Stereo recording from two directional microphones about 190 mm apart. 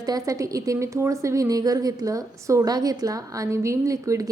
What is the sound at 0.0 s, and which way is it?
A woman's voice, 20° right (ahead or behind).